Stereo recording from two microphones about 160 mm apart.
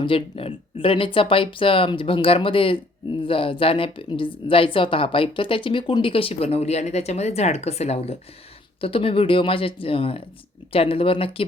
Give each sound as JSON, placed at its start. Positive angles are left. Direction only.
{"t": 0.0, "sound": "speech", "side_deg": 35}